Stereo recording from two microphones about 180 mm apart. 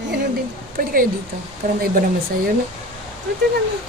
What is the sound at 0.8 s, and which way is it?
A woman's voice, 50° right (ahead or behind).